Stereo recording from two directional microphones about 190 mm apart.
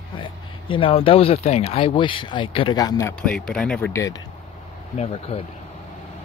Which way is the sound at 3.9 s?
15° left (ahead or behind).